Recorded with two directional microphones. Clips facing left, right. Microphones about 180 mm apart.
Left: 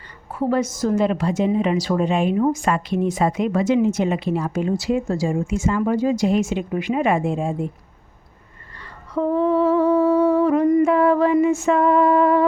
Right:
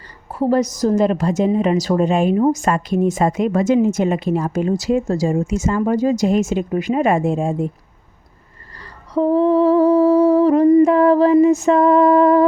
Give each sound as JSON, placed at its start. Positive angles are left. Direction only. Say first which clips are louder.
{"t": 0.3, "sound": "humming", "louder": "right 4 dB", "side_deg": -40}
{"t": 2.4, "sound": "a woman's voice", "louder": "right 3 dB", "side_deg": -40}
{"t": 9.1, "sound": "humming", "louder": "right 4 dB", "side_deg": -35}